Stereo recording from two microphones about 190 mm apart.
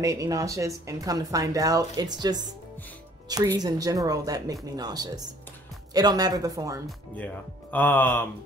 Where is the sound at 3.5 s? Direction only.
20° right (ahead or behind).